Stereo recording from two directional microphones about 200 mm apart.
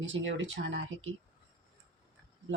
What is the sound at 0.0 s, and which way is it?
Speech, 70° right (ahead or behind).